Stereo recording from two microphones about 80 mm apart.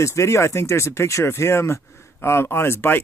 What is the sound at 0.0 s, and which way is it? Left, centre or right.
Speech, left.